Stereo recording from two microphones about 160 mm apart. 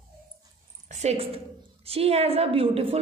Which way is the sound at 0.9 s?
40° right (ahead or behind).